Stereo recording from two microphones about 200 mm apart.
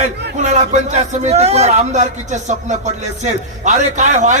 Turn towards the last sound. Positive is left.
turn(degrees=-35)  # may be behind; listen again after turning